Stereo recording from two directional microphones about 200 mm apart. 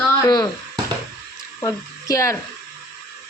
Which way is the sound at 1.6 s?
15° left (ahead or behind).